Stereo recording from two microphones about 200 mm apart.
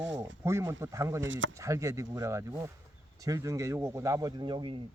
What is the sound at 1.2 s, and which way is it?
Speech, 70° right (ahead or behind).